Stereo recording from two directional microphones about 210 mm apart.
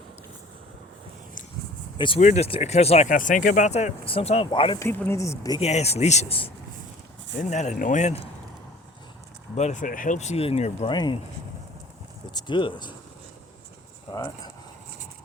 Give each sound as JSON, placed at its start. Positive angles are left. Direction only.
{"t": 2.0, "sound": "speech", "side_deg": 25}
{"t": 4.8, "sound": "speech", "side_deg": 10}
{"t": 5.5, "sound": "speech", "side_deg": 30}
{"t": 9.6, "sound": "speech", "side_deg": 35}
{"t": 10.9, "sound": "speech", "side_deg": 20}
{"t": 12.3, "sound": "speech", "side_deg": 20}
{"t": 14.1, "sound": "speech", "side_deg": 15}